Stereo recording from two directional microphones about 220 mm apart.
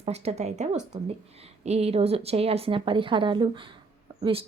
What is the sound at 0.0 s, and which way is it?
A woman's voice, 30° right (ahead or behind).